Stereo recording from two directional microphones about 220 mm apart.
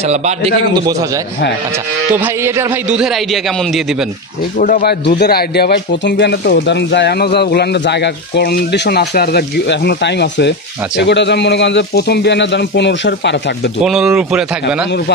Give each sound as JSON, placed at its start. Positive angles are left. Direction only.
{"t": 0.1, "sound": "a man's voice", "side_deg": -30}
{"t": 2.1, "sound": "speech", "side_deg": -10}
{"t": 4.6, "sound": "a man's voice", "side_deg": 40}
{"t": 13.8, "sound": "speech", "side_deg": -5}